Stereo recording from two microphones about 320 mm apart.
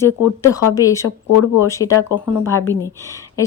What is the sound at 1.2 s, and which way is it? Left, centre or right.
Speech, left.